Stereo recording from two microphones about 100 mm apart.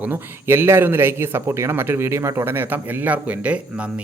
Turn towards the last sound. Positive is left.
turn(degrees=-15)  # may be behind; listen again after turning